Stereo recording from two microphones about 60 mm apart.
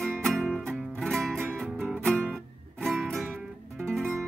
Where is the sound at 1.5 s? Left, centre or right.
Centre.